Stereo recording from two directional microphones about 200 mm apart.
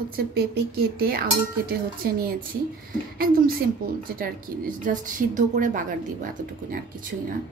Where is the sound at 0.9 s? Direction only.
50° right (ahead or behind).